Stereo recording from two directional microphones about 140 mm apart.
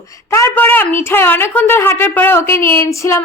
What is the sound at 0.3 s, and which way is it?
A woman's voice, 15° left (ahead or behind).